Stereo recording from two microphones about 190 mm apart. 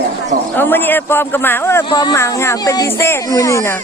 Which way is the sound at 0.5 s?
10° left (ahead or behind).